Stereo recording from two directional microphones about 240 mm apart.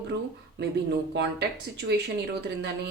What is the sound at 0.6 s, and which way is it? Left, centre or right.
Speech, right.